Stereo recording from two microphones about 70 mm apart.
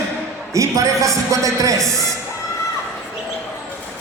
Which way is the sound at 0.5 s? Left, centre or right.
Right.